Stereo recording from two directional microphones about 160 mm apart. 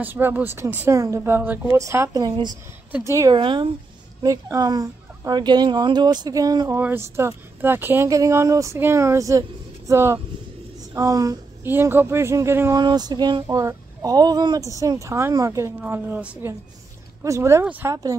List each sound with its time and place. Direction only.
0.0 s speech: 10° right (ahead or behind)